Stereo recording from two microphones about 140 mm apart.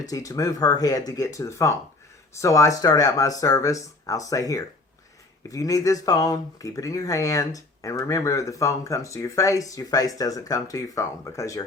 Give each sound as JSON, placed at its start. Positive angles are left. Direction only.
{"t": 0.1, "sound": "speech", "side_deg": 25}